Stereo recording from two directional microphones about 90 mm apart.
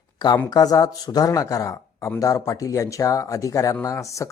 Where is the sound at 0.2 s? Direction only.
55° left (ahead or behind).